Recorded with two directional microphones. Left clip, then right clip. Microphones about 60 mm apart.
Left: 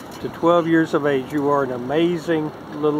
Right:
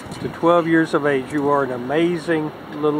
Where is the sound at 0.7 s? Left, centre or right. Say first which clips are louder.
Right 1 dB; centre.